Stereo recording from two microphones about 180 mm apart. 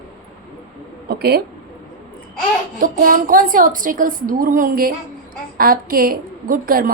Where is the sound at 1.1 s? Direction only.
60° right (ahead or behind).